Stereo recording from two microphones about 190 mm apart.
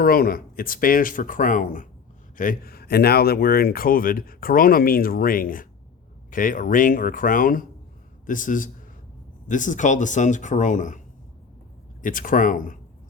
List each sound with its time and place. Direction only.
0.0 s speech: 50° left (ahead or behind)
12.0 s speech: 45° left (ahead or behind)